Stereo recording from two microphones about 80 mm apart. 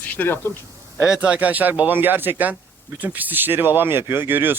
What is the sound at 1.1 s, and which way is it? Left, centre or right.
Speech, centre.